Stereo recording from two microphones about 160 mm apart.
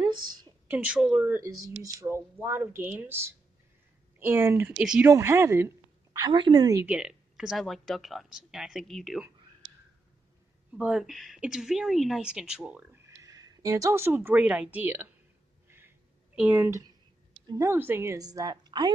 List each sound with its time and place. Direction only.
0.3 s a sound: 25° right (ahead or behind)
0.7 s a woman's voice: 10° right (ahead or behind)
6.1 s a woman's voice: 30° right (ahead or behind)
6.9 s speech: 5° right (ahead or behind)
10.8 s speech: 5° right (ahead or behind)
13.2 s speech: 25° right (ahead or behind)
16.3 s a woman's voice: 10° right (ahead or behind); by 18.9 s 25° right (ahead or behind)